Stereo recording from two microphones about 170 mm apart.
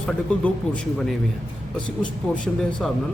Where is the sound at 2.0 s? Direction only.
5° left (ahead or behind).